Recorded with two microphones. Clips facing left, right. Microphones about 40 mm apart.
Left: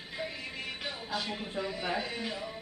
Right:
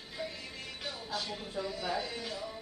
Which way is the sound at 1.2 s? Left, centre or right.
Left.